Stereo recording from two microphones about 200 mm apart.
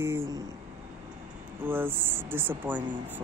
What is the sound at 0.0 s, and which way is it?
Speech, 15° right (ahead or behind).